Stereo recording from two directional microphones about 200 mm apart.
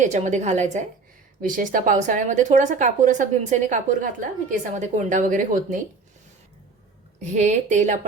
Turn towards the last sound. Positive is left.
turn(degrees=-35)  # may be behind; listen again after turning